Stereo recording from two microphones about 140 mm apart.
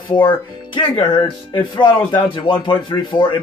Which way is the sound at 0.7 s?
35° left (ahead or behind).